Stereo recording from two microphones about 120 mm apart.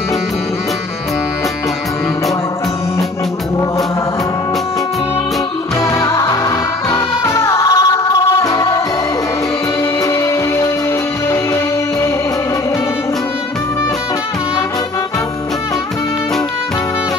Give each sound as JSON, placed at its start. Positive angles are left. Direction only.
{"t": 5.8, "sound": "music", "side_deg": 25}
{"t": 10.0, "sound": "music", "side_deg": 25}